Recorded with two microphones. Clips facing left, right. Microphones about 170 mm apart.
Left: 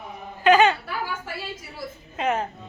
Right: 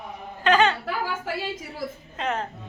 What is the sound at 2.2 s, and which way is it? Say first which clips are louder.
Speech: left 3 dB; 10° left (ahead or behind).